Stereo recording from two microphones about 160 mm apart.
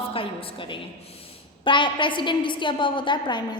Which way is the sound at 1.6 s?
30° left (ahead or behind).